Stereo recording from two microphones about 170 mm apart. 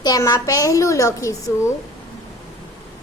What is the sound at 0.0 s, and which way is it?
A woman's voice, 20° left (ahead or behind).